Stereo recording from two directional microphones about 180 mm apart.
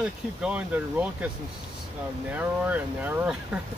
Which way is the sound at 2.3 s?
10° right (ahead or behind).